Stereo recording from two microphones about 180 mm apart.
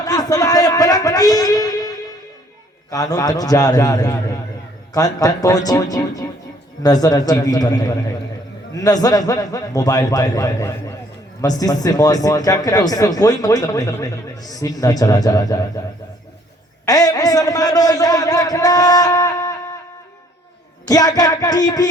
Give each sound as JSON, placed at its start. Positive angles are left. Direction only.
{"t": 0.0, "sound": "a sound", "side_deg": 20}
{"t": 2.9, "sound": "speech", "side_deg": 20}
{"t": 16.8, "sound": "speech", "side_deg": 20}
{"t": 20.8, "sound": "speech", "side_deg": 20}